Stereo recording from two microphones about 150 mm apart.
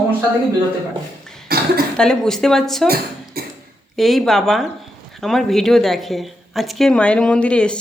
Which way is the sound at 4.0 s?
Centre (ahead or behind).